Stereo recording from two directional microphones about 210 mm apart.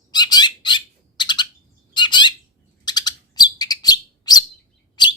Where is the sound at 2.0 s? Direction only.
20° left (ahead or behind).